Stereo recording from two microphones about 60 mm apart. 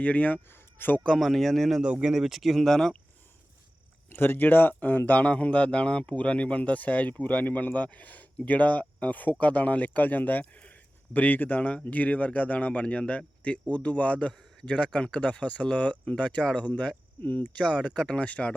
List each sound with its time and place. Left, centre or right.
0.0 s speech: left
0.5 s a sound: left
1.2 s speech: centre
1.8 s speech: centre
4.1 s speech: left